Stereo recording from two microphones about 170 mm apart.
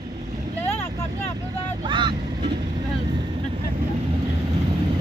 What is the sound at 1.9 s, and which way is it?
Vehicle, 25° right (ahead or behind).